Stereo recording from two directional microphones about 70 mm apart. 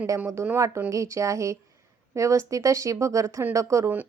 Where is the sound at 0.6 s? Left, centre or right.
Right.